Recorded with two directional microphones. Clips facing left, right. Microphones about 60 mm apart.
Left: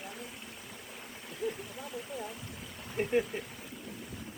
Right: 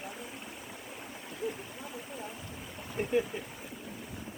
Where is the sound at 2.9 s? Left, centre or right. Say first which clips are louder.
Even; centre.